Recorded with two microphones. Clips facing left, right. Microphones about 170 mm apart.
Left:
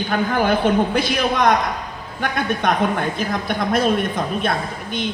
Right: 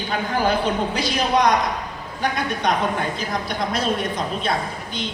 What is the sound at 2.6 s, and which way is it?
A woman's voice, 55° left (ahead or behind).